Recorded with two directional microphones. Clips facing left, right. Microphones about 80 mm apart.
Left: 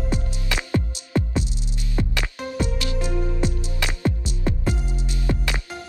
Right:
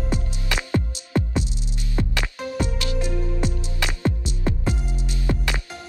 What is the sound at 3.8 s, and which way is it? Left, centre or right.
Music, right.